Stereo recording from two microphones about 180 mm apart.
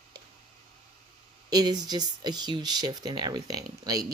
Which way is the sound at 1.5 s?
20° right (ahead or behind).